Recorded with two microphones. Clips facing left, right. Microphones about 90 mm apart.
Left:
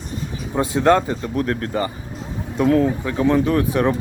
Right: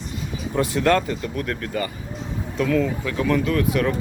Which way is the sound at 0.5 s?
25° left (ahead or behind).